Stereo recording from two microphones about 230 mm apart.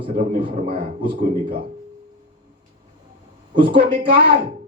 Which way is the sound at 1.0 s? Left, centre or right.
Right.